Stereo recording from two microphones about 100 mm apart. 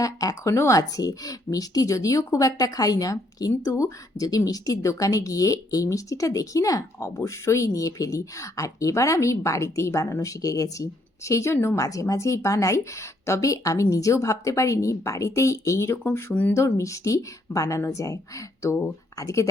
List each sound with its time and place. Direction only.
0.0 s a woman's voice: 35° left (ahead or behind); by 16.6 s 15° left (ahead or behind)
16.6 s a woman's voice: 30° left (ahead or behind)